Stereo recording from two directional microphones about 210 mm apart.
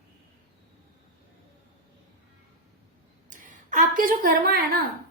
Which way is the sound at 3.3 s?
40° right (ahead or behind).